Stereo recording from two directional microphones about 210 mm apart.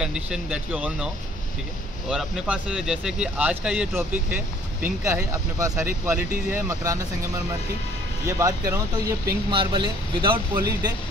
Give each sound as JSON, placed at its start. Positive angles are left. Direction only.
{"t": 0.0, "sound": "speech", "side_deg": -5}
{"t": 8.3, "sound": "speech", "side_deg": -15}